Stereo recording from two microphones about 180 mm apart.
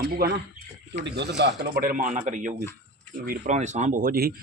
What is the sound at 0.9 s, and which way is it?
Speech, 75° right (ahead or behind).